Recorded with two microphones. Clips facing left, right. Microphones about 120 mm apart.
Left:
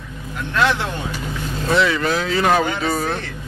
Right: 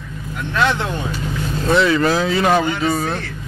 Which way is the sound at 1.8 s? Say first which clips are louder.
Right 3 dB; 35° right (ahead or behind).